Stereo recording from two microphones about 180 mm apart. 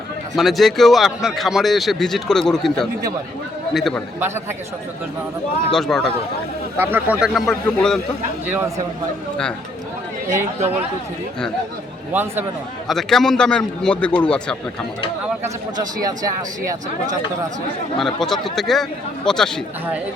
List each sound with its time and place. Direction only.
0.3 s speech: centre (ahead or behind)
5.7 s speech: centre (ahead or behind)
6.7 s speech: 10° right (ahead or behind)
8.4 s a man's voice: 10° right (ahead or behind)
12.1 s a man's voice: 10° right (ahead or behind)
12.9 s speech: centre (ahead or behind)
15.4 s speech: 20° right (ahead or behind)
17.9 s speech: centre (ahead or behind)